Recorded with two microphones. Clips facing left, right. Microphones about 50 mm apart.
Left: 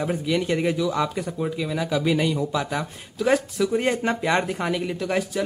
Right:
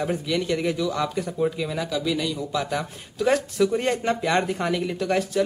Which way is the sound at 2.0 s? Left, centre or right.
Left.